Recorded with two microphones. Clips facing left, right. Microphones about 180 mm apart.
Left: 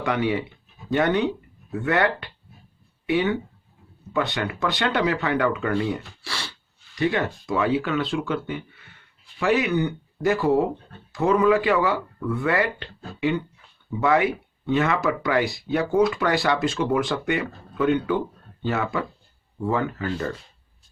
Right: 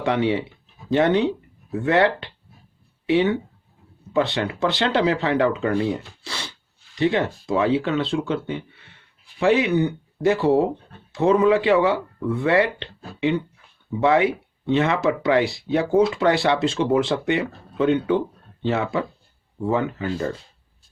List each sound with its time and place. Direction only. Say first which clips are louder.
0.0 s speech: right 3 dB; 25° right (ahead or behind)